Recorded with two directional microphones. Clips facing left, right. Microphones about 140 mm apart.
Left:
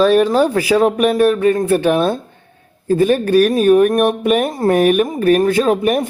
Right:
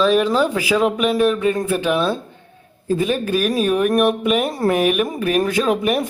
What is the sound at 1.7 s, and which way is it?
Speech, 50° left (ahead or behind).